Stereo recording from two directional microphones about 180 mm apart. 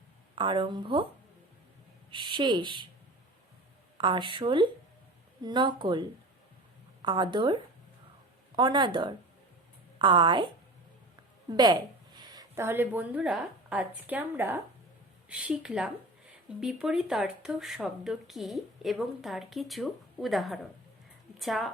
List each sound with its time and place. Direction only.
0.3 s speech: 30° right (ahead or behind)
2.0 s speech: 25° right (ahead or behind)
3.9 s speech: 25° right (ahead or behind)
8.5 s a woman's voice: 25° right (ahead or behind); by 21.7 s centre (ahead or behind)